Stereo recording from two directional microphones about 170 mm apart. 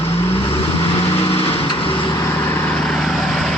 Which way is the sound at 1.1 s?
35° left (ahead or behind).